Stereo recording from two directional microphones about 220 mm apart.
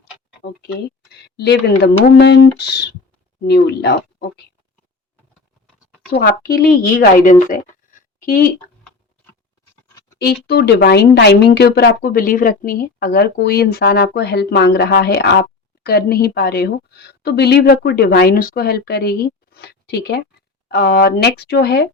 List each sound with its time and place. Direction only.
0.4 s speech: 55° left (ahead or behind)
6.1 s speech: 40° left (ahead or behind)
10.2 s speech: 45° left (ahead or behind)